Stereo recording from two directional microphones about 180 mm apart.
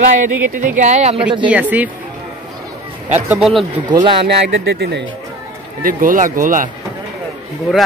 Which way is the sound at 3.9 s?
25° right (ahead or behind).